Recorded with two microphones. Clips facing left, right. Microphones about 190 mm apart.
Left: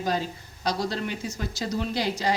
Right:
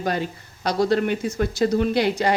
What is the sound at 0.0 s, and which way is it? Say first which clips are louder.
A woman's voice: right 3 dB; 60° right (ahead or behind).